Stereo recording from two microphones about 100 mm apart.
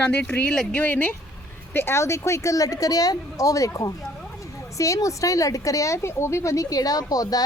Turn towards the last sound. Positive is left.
turn(degrees=40)  # may be behind; listen again after turning